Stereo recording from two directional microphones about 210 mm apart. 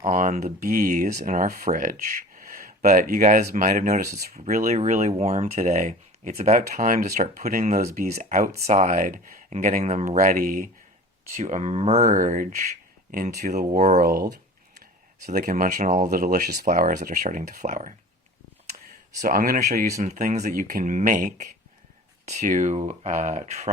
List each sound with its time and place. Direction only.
0.0 s speech: 35° right (ahead or behind)
15.3 s speech: 40° right (ahead or behind)
19.2 s speech: 40° right (ahead or behind)